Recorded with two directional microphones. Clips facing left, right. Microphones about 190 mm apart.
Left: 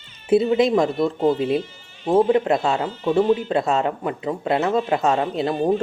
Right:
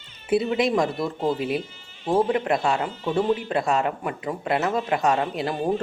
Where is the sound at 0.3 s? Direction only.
25° left (ahead or behind).